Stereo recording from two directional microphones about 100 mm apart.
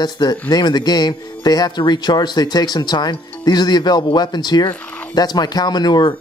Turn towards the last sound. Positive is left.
turn(degrees=45)  # may be behind; listen again after turning